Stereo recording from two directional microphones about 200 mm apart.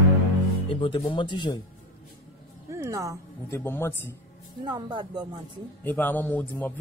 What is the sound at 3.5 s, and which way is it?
Speech, 10° left (ahead or behind).